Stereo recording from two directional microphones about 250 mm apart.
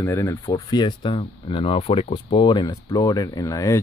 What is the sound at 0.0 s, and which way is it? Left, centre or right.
Speech, centre.